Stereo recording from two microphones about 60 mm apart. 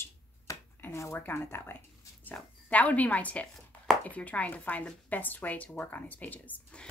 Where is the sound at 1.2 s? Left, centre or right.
Left.